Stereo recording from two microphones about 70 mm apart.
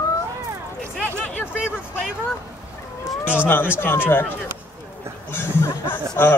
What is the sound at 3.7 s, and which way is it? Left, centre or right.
Speech, left.